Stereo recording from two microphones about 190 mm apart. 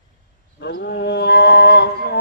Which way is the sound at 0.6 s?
55° left (ahead or behind).